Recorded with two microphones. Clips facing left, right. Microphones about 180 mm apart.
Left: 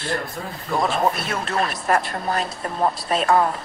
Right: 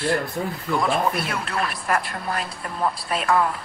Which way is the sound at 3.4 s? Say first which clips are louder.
Left 2 dB; 40° left (ahead or behind).